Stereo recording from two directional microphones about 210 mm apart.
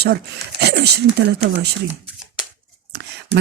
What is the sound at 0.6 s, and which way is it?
Speech, 50° right (ahead or behind).